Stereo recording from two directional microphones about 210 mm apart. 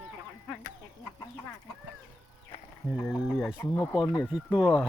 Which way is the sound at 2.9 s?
5° left (ahead or behind).